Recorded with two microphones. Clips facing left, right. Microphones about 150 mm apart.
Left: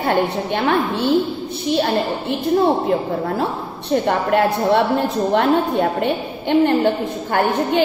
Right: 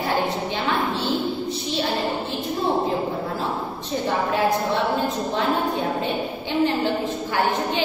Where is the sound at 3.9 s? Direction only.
65° left (ahead or behind).